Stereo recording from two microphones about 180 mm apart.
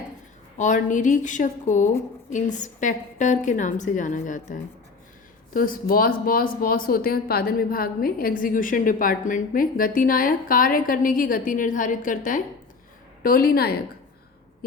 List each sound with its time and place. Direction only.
0.6 s a woman's voice: 45° left (ahead or behind)